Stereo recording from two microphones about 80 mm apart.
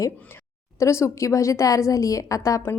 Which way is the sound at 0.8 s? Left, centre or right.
Left.